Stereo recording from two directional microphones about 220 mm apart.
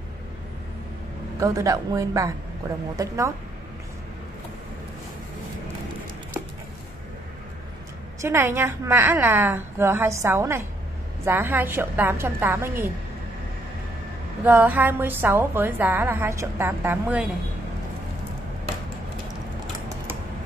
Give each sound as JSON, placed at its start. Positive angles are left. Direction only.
{"t": 1.4, "sound": "a woman's voice", "side_deg": -15}
{"t": 8.2, "sound": "a woman's voice", "side_deg": -10}
{"t": 14.4, "sound": "a woman's voice", "side_deg": -10}